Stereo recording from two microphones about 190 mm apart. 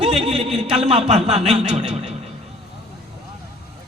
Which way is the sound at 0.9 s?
35° right (ahead or behind).